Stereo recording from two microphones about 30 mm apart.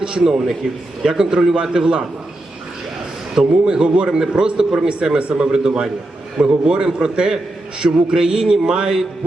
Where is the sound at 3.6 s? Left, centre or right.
Right.